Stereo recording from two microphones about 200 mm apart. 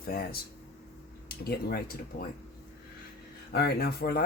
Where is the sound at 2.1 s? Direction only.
55° left (ahead or behind).